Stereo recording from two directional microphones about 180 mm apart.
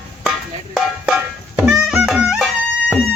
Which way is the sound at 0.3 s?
Centre (ahead or behind).